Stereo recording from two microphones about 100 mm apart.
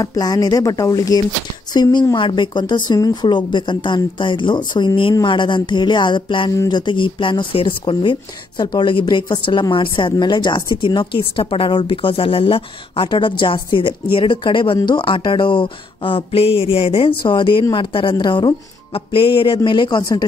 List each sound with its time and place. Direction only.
0.0 s a woman's voice: 40° left (ahead or behind)
2.1 s a woman's voice: 55° left (ahead or behind)
6.5 s speech: 35° left (ahead or behind)
6.9 s a woman's voice: 55° left (ahead or behind)
18.9 s a woman's voice: 60° left (ahead or behind); by 20.2 s 45° left (ahead or behind)